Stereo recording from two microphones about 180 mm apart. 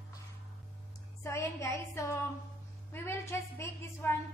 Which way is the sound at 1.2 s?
15° left (ahead or behind).